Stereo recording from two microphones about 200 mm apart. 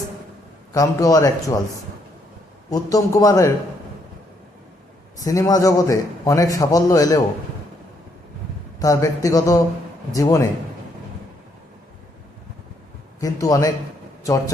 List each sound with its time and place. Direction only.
0.7 s a man's voice: 15° left (ahead or behind)
2.6 s a man's voice: 15° left (ahead or behind)
5.2 s a man's voice: 15° left (ahead or behind)
8.8 s a man's voice: 15° left (ahead or behind)
13.1 s a man's voice: 15° left (ahead or behind)